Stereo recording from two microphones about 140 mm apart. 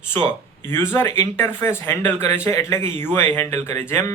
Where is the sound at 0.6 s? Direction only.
15° left (ahead or behind).